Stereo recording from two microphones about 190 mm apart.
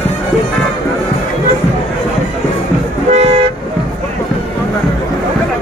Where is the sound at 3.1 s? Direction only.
35° right (ahead or behind).